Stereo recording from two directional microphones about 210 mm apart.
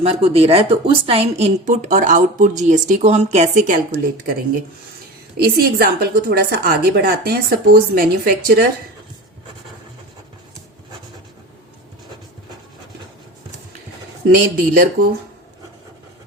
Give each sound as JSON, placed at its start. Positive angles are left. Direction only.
{"t": 0.0, "sound": "a woman's voice", "side_deg": -25}
{"t": 5.4, "sound": "a woman's voice", "side_deg": -45}
{"t": 14.3, "sound": "a woman's voice", "side_deg": -45}